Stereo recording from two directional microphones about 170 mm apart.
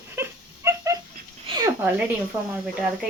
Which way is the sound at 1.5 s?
30° right (ahead or behind).